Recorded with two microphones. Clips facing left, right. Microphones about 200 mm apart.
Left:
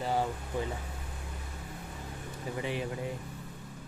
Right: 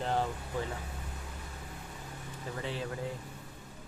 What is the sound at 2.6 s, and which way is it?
Speech, 15° left (ahead or behind).